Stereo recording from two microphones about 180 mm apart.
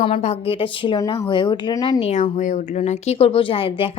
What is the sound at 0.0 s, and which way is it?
A woman's voice, 35° left (ahead or behind).